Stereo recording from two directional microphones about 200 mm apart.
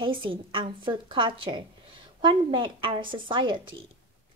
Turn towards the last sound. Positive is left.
turn(degrees=-25)  # may be behind; listen again after turning